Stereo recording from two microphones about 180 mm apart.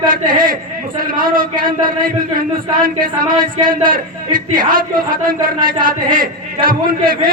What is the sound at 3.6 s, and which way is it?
Speech, 50° right (ahead or behind).